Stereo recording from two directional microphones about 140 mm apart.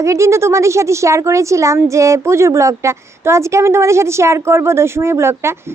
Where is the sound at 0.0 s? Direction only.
20° right (ahead or behind).